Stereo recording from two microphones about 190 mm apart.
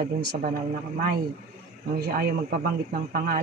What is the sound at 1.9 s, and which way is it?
Speech, 55° right (ahead or behind).